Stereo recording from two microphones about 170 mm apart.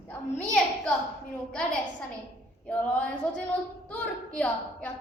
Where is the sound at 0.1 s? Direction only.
10° left (ahead or behind).